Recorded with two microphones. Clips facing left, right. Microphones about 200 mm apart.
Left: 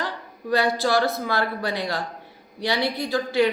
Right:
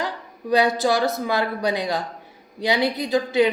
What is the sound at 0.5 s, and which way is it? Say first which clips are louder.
A woman's voice: right 2 dB; 20° right (ahead or behind).